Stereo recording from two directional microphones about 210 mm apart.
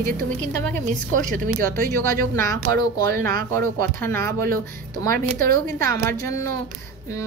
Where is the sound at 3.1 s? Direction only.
40° right (ahead or behind).